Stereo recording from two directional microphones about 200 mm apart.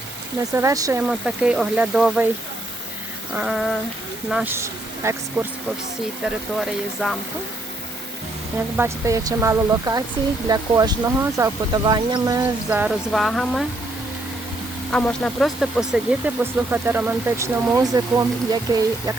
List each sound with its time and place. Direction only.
0.5 s speech: 15° right (ahead or behind)
1.0 s speech: 5° right (ahead or behind)
3.3 s speech: centre (ahead or behind)
6.2 s speech: centre (ahead or behind)
8.7 s speech: 15° right (ahead or behind)
14.9 s speech: 5° left (ahead or behind); by 19.1 s 20° right (ahead or behind)